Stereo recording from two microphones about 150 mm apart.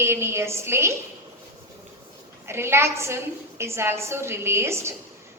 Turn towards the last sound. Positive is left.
turn(degrees=-15)  # may be behind; listen again after turning